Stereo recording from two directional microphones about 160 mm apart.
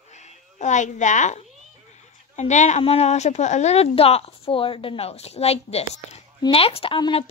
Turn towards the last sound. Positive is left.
turn(degrees=35)  # may be behind; listen again after turning